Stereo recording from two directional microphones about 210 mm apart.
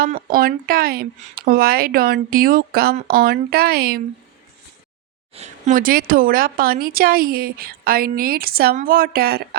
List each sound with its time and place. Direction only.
0.0 s a woman's voice: 40° right (ahead or behind)
5.3 s a woman's voice: 35° right (ahead or behind)